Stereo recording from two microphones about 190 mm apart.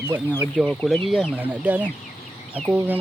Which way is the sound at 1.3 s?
10° right (ahead or behind).